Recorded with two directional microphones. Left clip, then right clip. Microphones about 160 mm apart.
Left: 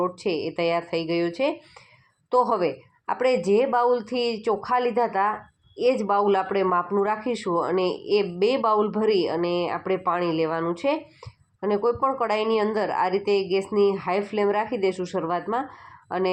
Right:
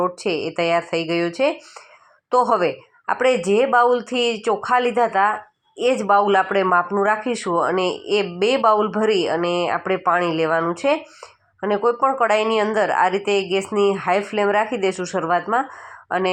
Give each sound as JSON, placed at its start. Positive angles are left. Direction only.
{"t": 0.0, "sound": "speech", "side_deg": -30}
{"t": 13.2, "sound": "speech", "side_deg": -20}